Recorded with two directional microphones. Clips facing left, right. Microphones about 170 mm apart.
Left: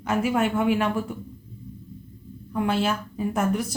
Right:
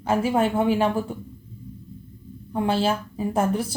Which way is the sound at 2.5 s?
30° right (ahead or behind).